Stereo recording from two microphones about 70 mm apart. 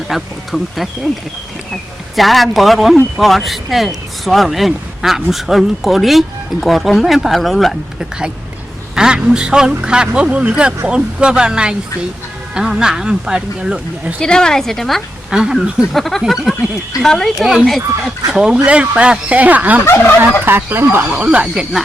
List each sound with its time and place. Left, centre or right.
0.1 s speech: centre
9.0 s speech: centre
14.2 s a woman's voice: centre
15.3 s speech: centre
15.9 s speech: centre
17.0 s a woman's voice: centre
18.3 s speech: centre
19.8 s turkey: left
20.4 s speech: right
21.1 s speech: centre